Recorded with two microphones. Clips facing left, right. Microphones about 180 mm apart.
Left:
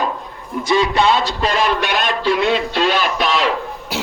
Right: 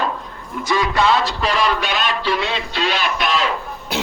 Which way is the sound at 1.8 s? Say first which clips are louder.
Left 3 dB; 55° left (ahead or behind).